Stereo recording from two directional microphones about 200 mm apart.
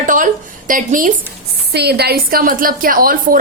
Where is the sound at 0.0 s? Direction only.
40° right (ahead or behind).